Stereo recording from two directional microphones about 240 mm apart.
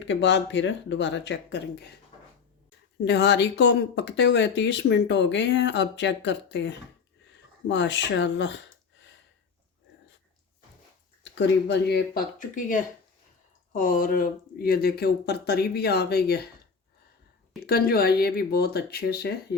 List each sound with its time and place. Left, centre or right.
0.0 s speech: left
3.0 s speech: left
11.2 s speech: left
17.7 s speech: left